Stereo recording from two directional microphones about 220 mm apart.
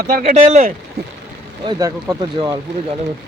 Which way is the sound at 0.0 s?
45° right (ahead or behind).